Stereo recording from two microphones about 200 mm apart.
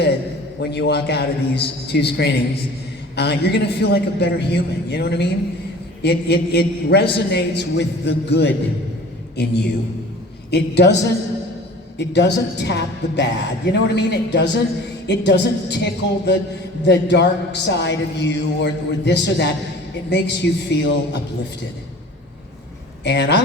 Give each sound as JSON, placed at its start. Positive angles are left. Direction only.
{"t": 0.7, "sound": "a man's voice", "side_deg": 55}
{"t": 23.0, "sound": "speech", "side_deg": 55}